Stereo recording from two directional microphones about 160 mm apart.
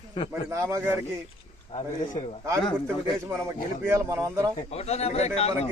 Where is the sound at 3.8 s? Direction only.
15° right (ahead or behind).